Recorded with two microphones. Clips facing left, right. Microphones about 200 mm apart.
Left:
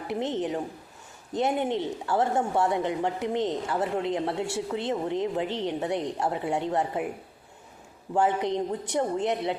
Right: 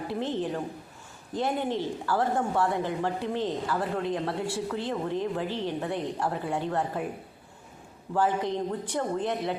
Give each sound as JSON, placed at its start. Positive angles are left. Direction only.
{"t": 0.1, "sound": "speech", "side_deg": 20}
{"t": 8.1, "sound": "speech", "side_deg": 20}